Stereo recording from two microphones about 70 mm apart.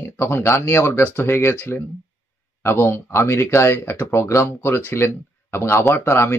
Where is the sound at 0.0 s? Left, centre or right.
Left.